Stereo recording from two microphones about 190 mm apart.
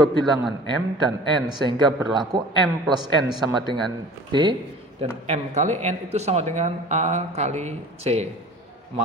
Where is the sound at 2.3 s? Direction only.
25° right (ahead or behind).